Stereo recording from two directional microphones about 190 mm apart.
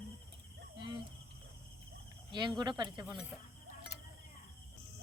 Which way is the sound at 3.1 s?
5° right (ahead or behind).